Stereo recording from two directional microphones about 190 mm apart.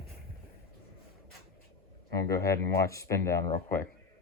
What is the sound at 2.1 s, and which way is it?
Speech, 15° left (ahead or behind).